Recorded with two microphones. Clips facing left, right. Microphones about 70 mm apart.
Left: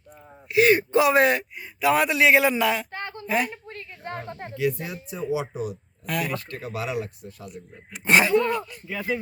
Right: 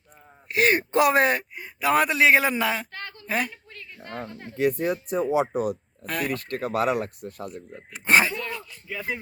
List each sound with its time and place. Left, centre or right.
0.5 s speech: right
2.9 s a sound: left
3.2 s a woman's voice: right
3.5 s a sound: left
4.3 s speech: left
4.5 s speech: right
6.1 s speech: right
7.5 s speech: right
8.3 s speech: left
8.9 s speech: centre